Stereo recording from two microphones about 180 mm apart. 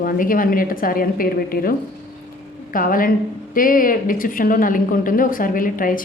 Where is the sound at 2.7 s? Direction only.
50° left (ahead or behind).